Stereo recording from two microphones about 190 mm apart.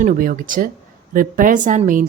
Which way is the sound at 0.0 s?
45° right (ahead or behind).